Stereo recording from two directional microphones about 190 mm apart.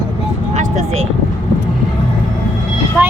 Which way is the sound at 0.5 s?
40° right (ahead or behind).